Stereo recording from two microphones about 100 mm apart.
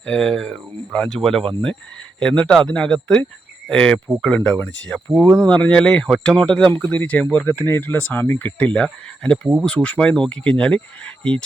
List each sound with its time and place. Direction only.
0.0 s speech: 5° left (ahead or behind)